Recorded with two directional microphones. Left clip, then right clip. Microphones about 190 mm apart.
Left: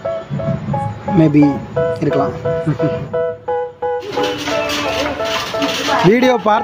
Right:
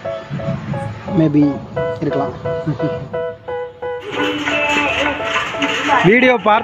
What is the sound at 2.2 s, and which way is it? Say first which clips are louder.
Music: left 3 dB; centre (ahead or behind).